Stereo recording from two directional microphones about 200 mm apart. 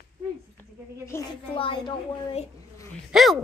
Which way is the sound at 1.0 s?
15° left (ahead or behind).